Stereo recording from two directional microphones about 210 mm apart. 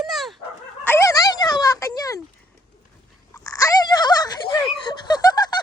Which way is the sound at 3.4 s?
15° left (ahead or behind).